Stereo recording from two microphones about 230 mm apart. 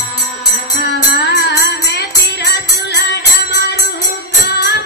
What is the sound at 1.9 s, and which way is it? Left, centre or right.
Music, left.